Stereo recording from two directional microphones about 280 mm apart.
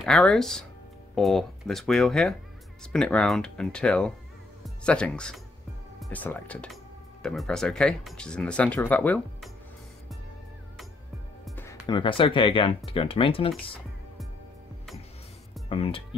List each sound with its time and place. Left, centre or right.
0.0 s speech: centre
11.4 s speech: centre
15.7 s speech: centre